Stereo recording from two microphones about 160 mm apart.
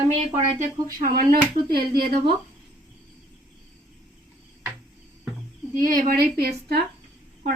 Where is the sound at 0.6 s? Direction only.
60° right (ahead or behind); by 2.1 s 75° right (ahead or behind).